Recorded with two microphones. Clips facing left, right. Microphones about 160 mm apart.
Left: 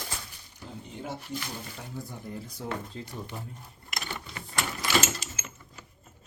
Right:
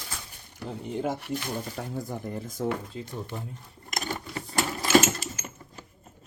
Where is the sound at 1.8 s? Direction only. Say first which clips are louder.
Right 7 dB; 60° right (ahead or behind).